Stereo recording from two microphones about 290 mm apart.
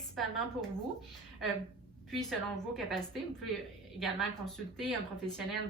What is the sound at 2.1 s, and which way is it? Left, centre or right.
A woman's voice, centre.